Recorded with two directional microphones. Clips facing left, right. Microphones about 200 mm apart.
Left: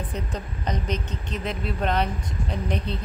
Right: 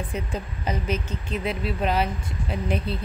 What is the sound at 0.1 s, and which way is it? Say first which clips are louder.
A woman's voice: right 1 dB; 10° right (ahead or behind).